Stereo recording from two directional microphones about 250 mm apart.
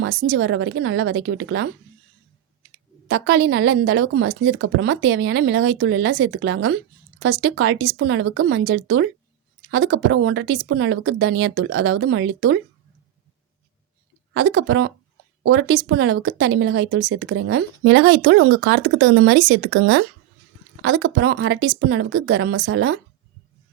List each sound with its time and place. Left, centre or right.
0.0 s speech: right
3.1 s speech: right
14.3 s speech: right